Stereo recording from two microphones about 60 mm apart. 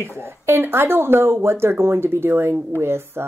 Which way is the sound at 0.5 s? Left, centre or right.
Right.